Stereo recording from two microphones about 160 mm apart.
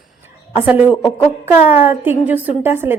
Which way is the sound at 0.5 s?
10° right (ahead or behind).